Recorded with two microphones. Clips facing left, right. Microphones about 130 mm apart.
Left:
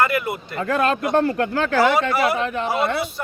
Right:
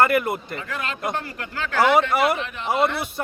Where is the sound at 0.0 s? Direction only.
50° right (ahead or behind).